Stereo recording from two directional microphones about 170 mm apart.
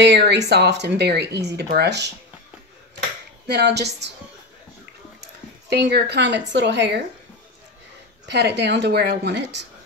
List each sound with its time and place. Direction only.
0.0 s speech: 85° right
3.4 s a woman's voice: 75° right (ahead or behind)
5.7 s a woman's voice: 75° right (ahead or behind); by 7.0 s 90° right
8.3 s a woman's voice: 80° right